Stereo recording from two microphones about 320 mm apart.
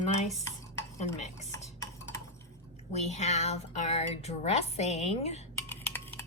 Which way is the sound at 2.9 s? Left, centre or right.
Left.